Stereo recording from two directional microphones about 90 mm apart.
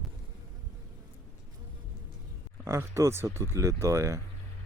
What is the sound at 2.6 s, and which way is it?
Speech, 35° right (ahead or behind).